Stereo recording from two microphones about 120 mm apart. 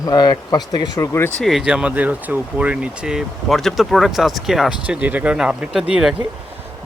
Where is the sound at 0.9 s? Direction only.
20° left (ahead or behind).